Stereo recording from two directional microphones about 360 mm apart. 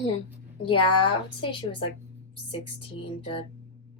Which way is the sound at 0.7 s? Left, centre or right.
Centre.